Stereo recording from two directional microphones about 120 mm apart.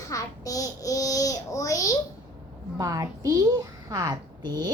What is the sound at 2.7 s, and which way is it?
A woman's voice, 30° right (ahead or behind).